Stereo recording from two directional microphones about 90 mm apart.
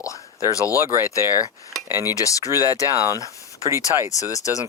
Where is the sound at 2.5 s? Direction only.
30° right (ahead or behind).